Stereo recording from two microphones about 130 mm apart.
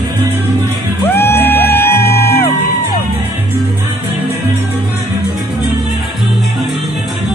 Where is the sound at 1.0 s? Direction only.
15° left (ahead or behind).